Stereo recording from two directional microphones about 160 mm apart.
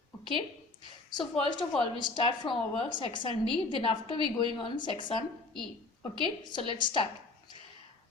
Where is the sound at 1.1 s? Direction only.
30° left (ahead or behind).